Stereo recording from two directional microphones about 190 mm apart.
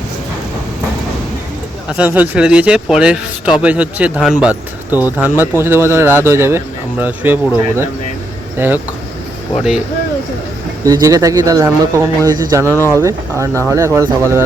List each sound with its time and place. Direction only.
1.9 s speech: 10° right (ahead or behind)
8.5 s speech: 10° right (ahead or behind)
10.8 s speech: 20° right (ahead or behind)